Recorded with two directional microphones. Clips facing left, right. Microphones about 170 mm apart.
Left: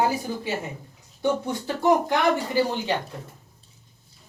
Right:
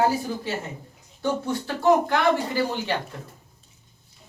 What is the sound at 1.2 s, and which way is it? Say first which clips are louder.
Speech: left 1 dB; 20° left (ahead or behind).